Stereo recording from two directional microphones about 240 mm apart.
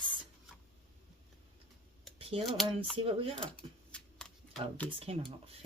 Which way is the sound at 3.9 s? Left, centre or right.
Centre.